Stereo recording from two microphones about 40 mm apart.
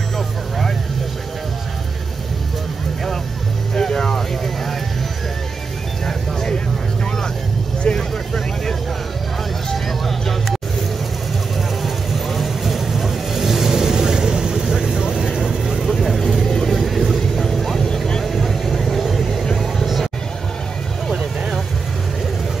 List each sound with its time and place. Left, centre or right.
3.7 s music: centre
6.0 s vehicle: centre
7.8 s vehicle: left
9.8 s music: centre
11.8 s vehicle: centre
16.0 s vehicle: centre
16.4 s vehicle: centre
16.7 s vehicle: centre
17.5 s vehicle: centre
18.2 s vehicle: centre